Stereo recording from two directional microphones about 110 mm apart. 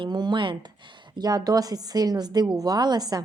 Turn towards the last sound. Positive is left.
turn(degrees=-40)  # may be behind; listen again after turning